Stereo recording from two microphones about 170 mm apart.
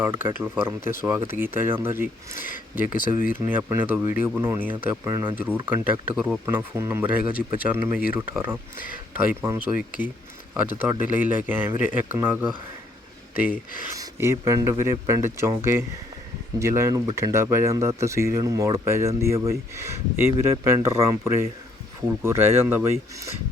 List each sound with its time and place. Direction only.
0.0 s speech: 15° right (ahead or behind)
2.3 s speech: 55° left (ahead or behind)
3.3 s speech: 10° right (ahead or behind)